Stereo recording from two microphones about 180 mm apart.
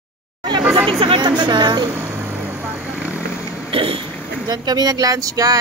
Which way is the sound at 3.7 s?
30° right (ahead or behind).